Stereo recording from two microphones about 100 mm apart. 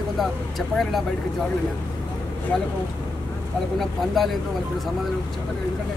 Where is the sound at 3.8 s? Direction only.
Centre (ahead or behind).